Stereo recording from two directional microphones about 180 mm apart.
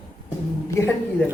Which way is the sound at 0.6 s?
15° left (ahead or behind).